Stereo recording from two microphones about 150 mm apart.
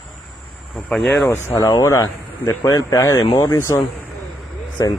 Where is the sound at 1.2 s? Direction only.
15° left (ahead or behind).